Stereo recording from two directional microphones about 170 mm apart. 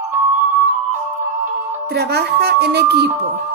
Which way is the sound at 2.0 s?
75° right (ahead or behind).